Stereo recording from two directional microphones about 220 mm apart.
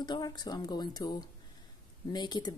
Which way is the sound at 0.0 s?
20° left (ahead or behind).